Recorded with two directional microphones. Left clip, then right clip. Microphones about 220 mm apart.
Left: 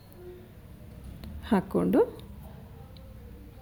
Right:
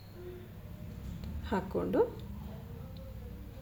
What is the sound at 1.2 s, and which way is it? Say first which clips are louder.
Speech: left 7 dB; 50° left (ahead or behind).